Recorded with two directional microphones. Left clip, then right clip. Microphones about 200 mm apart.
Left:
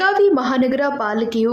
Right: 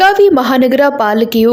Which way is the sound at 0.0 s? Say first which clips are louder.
Right 7 dB; 30° right (ahead or behind).